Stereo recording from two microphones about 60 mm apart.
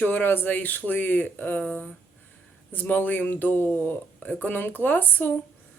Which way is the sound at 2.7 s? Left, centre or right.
Left.